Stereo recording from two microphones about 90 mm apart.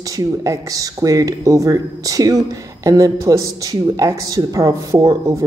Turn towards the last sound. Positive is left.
turn(degrees=-40)  # may be behind; listen again after turning